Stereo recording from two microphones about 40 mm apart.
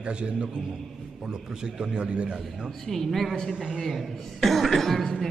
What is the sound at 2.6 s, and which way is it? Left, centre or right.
Speech, centre.